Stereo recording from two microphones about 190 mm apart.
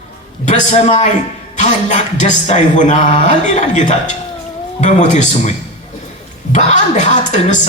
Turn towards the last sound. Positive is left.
turn(degrees=40)  # may be behind; listen again after turning